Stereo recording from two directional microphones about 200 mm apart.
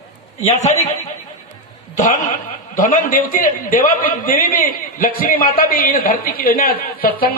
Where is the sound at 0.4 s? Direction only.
35° left (ahead or behind).